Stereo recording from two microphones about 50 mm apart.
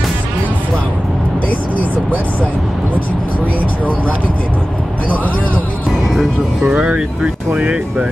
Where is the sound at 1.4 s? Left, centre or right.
Left.